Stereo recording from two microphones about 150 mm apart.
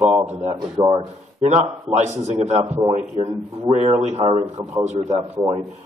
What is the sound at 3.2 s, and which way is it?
Speech, 35° right (ahead or behind).